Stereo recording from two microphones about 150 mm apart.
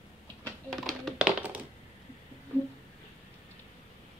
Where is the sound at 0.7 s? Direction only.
Centre (ahead or behind).